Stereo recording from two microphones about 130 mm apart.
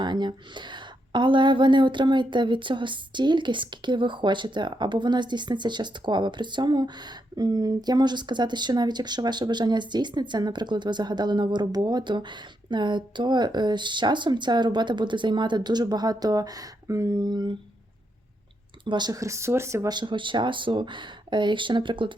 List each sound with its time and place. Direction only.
0.0 s a woman's voice: 35° right (ahead or behind)
18.9 s speech: 35° right (ahead or behind)
19.9 s a woman's voice: 35° right (ahead or behind)